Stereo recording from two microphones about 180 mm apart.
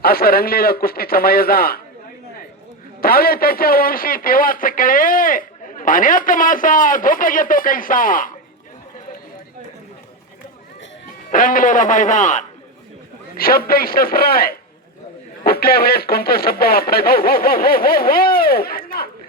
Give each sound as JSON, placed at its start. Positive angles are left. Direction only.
{"t": 0.0, "sound": "speech", "side_deg": 55}
{"t": 3.0, "sound": "a man's voice", "side_deg": 55}
{"t": 11.3, "sound": "a man's voice", "side_deg": 50}
{"t": 13.4, "sound": "speech", "side_deg": 55}